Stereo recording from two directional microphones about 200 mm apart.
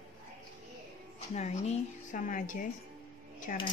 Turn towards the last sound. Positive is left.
turn(degrees=45)  # may be behind; listen again after turning